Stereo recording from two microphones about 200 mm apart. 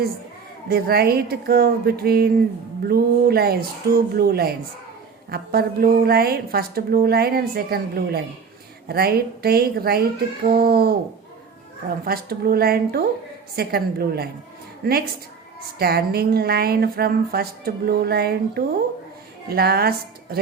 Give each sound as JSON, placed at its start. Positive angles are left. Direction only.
{"t": 0.7, "sound": "a woman's voice", "side_deg": -50}
{"t": 12.0, "sound": "a woman's voice", "side_deg": -50}